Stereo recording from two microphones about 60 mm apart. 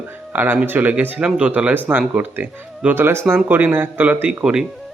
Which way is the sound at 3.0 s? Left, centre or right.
Right.